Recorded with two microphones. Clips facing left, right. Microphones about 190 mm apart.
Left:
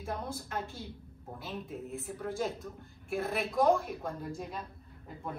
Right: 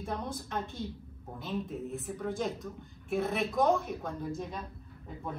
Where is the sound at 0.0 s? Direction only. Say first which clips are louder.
Right 1 dB; centre (ahead or behind).